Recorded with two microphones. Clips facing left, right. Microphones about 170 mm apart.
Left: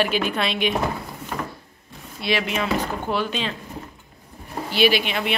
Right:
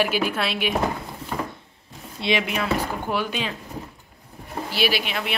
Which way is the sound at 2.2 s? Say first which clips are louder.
Right 1 dB; 20° right (ahead or behind).